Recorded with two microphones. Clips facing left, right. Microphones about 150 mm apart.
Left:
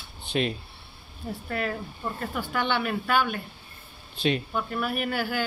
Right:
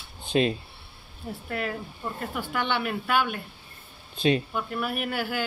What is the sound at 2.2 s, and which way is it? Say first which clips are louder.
Speech: left 1 dB; centre (ahead or behind).